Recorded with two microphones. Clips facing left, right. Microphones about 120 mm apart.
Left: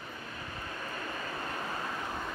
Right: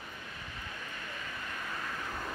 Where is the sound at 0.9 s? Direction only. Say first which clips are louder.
Left 5 dB; 40° left (ahead or behind).